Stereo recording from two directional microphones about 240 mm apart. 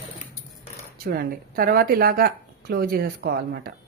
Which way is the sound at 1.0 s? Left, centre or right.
Right.